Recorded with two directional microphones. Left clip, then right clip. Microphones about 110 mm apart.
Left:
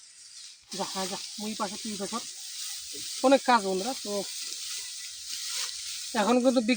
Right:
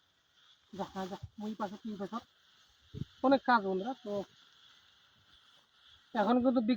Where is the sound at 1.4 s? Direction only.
25° left (ahead or behind).